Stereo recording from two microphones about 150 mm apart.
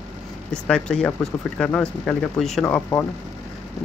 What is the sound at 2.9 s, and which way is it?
Speech, 25° left (ahead or behind).